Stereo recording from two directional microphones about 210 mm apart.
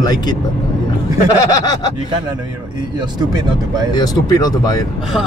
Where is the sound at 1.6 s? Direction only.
20° left (ahead or behind).